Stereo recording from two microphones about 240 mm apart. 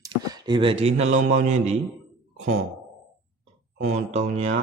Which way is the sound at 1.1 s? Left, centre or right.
Right.